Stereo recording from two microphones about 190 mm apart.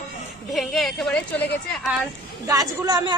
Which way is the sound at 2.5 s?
20° right (ahead or behind).